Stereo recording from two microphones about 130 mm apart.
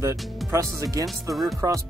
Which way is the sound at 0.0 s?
25° right (ahead or behind).